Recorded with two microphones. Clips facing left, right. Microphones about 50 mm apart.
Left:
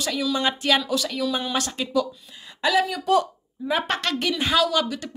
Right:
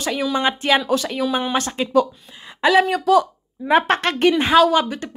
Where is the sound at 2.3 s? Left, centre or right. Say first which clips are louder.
Right 6 dB; right.